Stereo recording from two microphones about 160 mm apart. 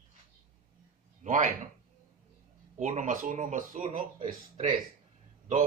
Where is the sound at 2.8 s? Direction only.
50° right (ahead or behind).